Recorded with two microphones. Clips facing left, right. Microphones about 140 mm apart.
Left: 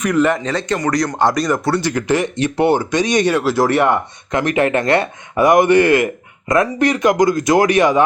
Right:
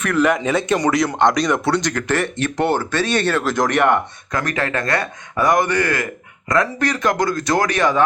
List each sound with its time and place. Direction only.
0.2 s speech: 5° right (ahead or behind)
4.3 s speech: 20° left (ahead or behind)